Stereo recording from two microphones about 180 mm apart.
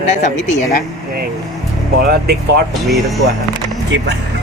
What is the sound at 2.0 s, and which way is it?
Speech, 60° right (ahead or behind).